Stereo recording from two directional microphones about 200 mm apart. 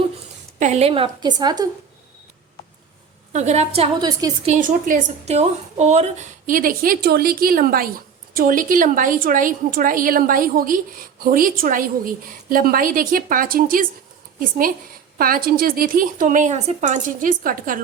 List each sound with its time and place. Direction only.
0.6 s a woman's voice: 35° right (ahead or behind)
3.3 s a woman's voice: 35° right (ahead or behind)
15.2 s a woman's voice: 45° right (ahead or behind)